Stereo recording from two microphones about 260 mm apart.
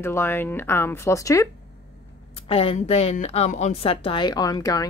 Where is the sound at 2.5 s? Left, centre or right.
Left.